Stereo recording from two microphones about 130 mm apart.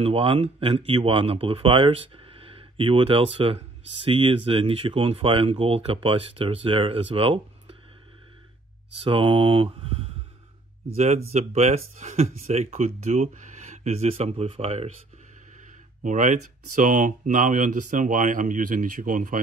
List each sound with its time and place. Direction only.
0.0 s speech: 45° right (ahead or behind)
9.0 s mantra: 40° right (ahead or behind)
11.0 s speech: 60° right (ahead or behind)
16.0 s speech: 75° right (ahead or behind); by 19.4 s 90° right